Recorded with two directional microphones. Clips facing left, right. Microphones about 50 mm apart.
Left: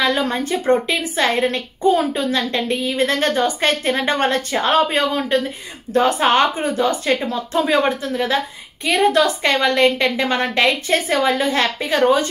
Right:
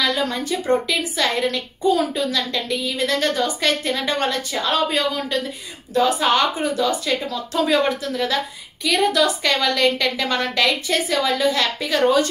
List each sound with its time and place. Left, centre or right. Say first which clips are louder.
0.0 s a woman's voice: left 3 dB; left